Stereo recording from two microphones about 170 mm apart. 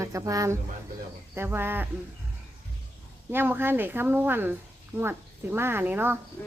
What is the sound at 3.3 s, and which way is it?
Speech, 15° right (ahead or behind).